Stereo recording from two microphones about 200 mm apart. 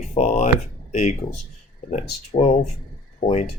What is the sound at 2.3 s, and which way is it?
Speech, 35° left (ahead or behind).